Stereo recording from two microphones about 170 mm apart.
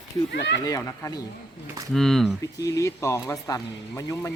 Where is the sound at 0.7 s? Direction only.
20° left (ahead or behind).